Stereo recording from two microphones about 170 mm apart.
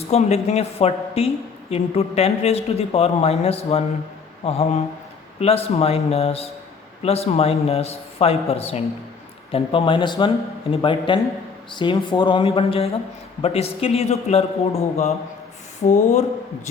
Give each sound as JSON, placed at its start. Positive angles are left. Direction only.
{"t": 0.1, "sound": "speech", "side_deg": 40}